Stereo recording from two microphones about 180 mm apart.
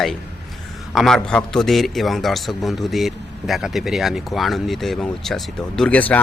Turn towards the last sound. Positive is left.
turn(degrees=10)  # may be behind; listen again after turning